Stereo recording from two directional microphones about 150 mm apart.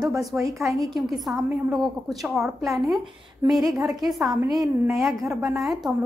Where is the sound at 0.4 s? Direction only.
20° right (ahead or behind).